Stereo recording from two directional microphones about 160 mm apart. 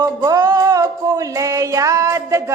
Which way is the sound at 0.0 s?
20° right (ahead or behind).